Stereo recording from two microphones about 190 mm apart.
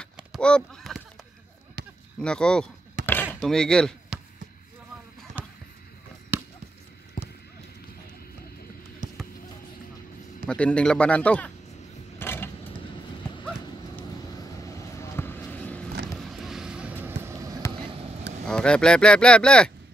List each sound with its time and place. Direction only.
0.0 s a sound: 5° left (ahead or behind)
2.1 s speech: 5° left (ahead or behind)
3.3 s chop: centre (ahead or behind)
5.4 s a sound: 10° right (ahead or behind)
6.3 s basketball bounce: 10° right (ahead or behind)
7.2 s clip-clop: 45° left (ahead or behind)
9.0 s basketball bounce: 45° right (ahead or behind)
10.4 s a man's voice: 5° left (ahead or behind)
12.2 s a sound: 10° left (ahead or behind)
14.6 s vehicle: 15° left (ahead or behind)
16.1 s a sound: centre (ahead or behind); by 17.6 s 15° right (ahead or behind)
17.7 s vehicle: 30° right (ahead or behind)
18.5 s speech: 5° left (ahead or behind)